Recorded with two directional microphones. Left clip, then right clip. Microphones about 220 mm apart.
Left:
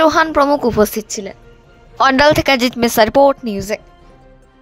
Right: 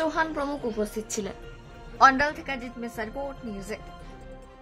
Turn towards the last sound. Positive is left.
turn(degrees=40)  # may be behind; listen again after turning